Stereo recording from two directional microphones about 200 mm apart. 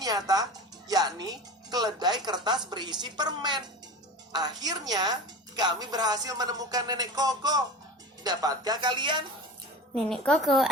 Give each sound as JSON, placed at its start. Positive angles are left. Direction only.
{"t": 0.9, "sound": "a woman's voice", "side_deg": -20}
{"t": 9.9, "sound": "a woman's voice", "side_deg": 5}